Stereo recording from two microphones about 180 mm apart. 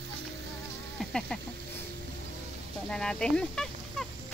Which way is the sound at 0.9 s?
5° left (ahead or behind).